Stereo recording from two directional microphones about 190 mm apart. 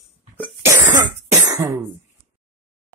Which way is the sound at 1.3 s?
15° right (ahead or behind).